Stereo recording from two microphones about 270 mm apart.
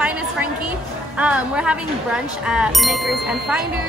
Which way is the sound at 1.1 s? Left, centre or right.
Centre.